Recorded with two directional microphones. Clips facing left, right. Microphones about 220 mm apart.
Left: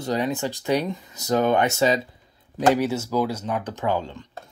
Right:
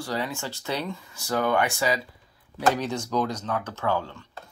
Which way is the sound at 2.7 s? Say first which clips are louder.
Left 4 dB; 10° left (ahead or behind).